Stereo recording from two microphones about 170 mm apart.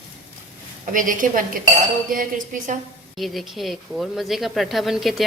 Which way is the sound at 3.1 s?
Centre (ahead or behind).